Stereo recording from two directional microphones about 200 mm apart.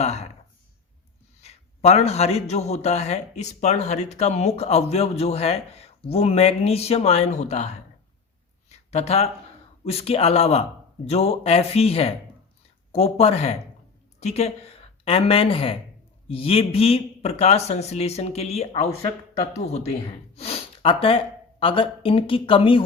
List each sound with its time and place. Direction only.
0.0 s a sound: 30° left (ahead or behind)
1.4 s a man's voice: 30° left (ahead or behind)
8.9 s a man's voice: 30° left (ahead or behind)